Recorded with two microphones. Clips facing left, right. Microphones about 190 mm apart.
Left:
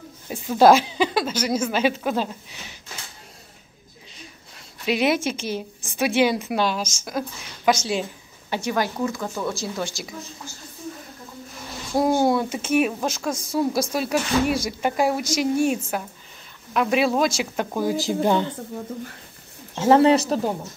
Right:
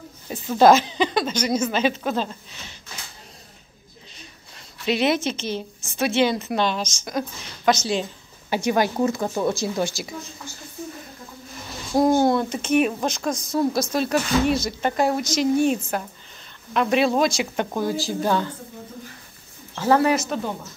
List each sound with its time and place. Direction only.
0.3 s speech: 10° left (ahead or behind)
4.8 s speech: 10° left (ahead or behind)
8.5 s a woman's voice: 15° right (ahead or behind)
9.1 s speech: 25° right (ahead or behind)
11.9 s speech: 5° left (ahead or behind)
19.7 s speech: 25° left (ahead or behind)